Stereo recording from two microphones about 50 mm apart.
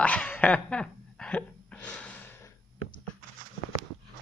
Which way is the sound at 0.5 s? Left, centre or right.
Left.